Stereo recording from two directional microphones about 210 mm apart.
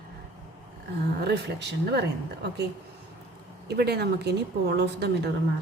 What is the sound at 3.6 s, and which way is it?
A woman's voice, 50° right (ahead or behind).